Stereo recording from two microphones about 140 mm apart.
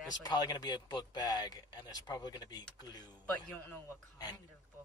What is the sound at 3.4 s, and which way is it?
Speech, 15° left (ahead or behind).